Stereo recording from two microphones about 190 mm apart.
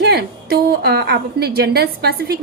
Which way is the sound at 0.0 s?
60° right (ahead or behind).